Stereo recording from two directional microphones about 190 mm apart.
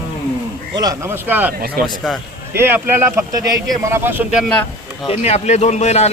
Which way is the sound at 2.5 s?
10° right (ahead or behind).